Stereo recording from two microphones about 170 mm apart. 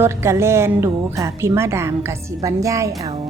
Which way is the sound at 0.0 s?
15° right (ahead or behind).